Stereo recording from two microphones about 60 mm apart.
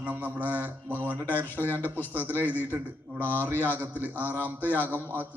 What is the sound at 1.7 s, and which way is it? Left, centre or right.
Speech, left.